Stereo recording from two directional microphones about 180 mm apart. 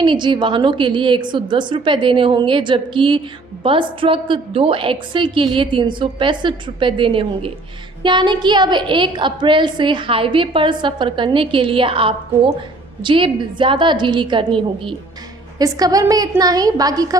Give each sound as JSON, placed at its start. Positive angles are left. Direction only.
{"t": 0.0, "sound": "a woman's voice", "side_deg": -25}
{"t": 15.6, "sound": "a woman's voice", "side_deg": -20}